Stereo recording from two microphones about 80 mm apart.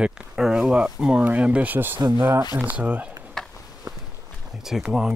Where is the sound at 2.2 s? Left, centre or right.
Right.